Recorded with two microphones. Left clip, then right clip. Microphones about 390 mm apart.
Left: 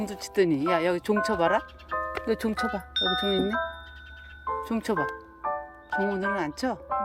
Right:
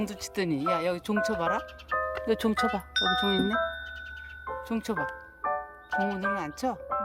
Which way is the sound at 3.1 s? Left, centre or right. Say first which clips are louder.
Even; right.